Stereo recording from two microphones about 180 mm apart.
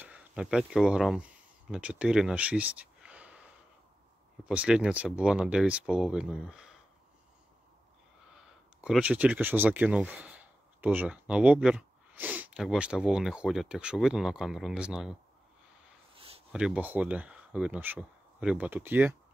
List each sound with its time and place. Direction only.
0.0 s speech: 10° right (ahead or behind)
4.5 s speech: 5° right (ahead or behind)
8.3 s speech: 5° right (ahead or behind)
16.2 s a sound: 30° right (ahead or behind)
16.5 s speech: 5° right (ahead or behind)